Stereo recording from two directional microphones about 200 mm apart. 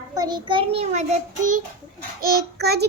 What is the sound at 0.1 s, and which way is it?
A child's voice, 20° right (ahead or behind).